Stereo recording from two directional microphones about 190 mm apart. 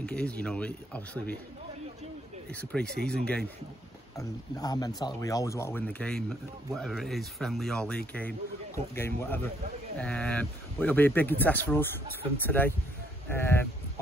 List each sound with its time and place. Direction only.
0.0 s speech: 5° left (ahead or behind)
2.5 s speech: 5° left (ahead or behind)
4.2 s speech: 20° left (ahead or behind)